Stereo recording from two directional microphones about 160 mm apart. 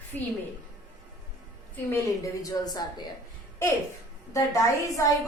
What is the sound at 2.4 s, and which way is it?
Speech, 25° left (ahead or behind).